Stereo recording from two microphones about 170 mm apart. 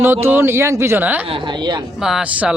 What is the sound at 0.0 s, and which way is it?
Speech, 10° right (ahead or behind).